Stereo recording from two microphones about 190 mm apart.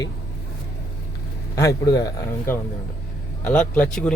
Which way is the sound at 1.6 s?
15° left (ahead or behind).